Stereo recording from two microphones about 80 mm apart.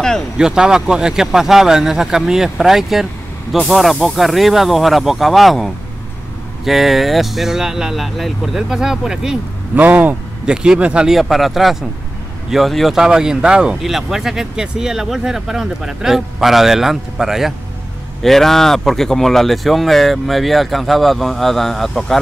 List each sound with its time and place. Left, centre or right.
0.4 s speech: centre
9.8 s speech: right
10.4 s speech: centre
11.1 s speech: centre